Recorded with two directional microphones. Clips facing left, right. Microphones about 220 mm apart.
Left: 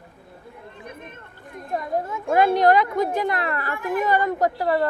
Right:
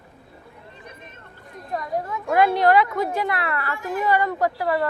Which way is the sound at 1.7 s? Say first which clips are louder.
Left 1 dB; 25° left (ahead or behind).